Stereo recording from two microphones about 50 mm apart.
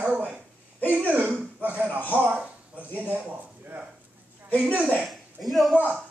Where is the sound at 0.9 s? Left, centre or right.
Right.